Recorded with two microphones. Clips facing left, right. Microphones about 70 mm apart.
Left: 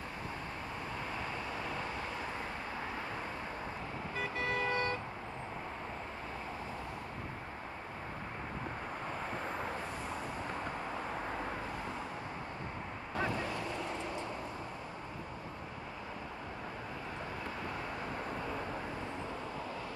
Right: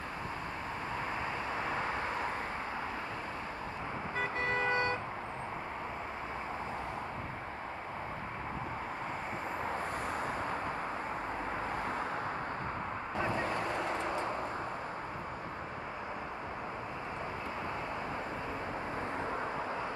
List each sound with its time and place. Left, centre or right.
4.2 s vehicle: right
13.2 s vehicle: right